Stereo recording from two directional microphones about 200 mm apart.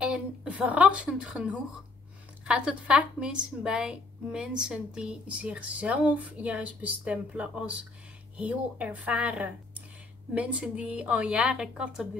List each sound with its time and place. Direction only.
0.0 s a woman's voice: 5° right (ahead or behind)